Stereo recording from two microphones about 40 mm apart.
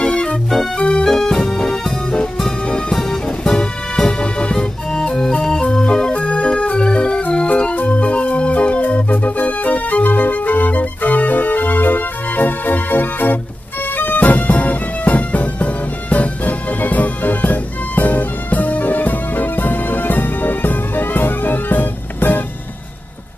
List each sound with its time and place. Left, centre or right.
0.0 s music: left
1.0 s music: centre
2.9 s music: centre
6.1 s music: left
7.4 s organ: left
13.9 s music: left